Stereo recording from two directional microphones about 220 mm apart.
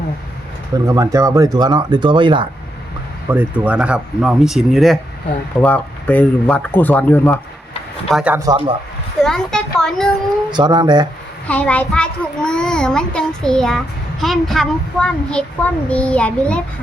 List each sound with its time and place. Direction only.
0.9 s speech: 15° right (ahead or behind)
3.2 s a child's voice: 5° right (ahead or behind)
8.1 s speech: 5° right (ahead or behind)
9.2 s a child's voice: centre (ahead or behind)
10.5 s speech: 20° right (ahead or behind)
11.4 s a child's voice: 5° left (ahead or behind)